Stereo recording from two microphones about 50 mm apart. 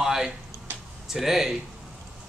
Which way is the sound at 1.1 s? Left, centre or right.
Centre.